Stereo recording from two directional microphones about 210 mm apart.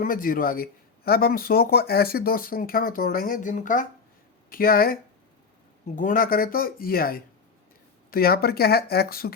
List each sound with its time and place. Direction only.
0.0 s speech: 40° left (ahead or behind)
6.0 s speech: 40° left (ahead or behind)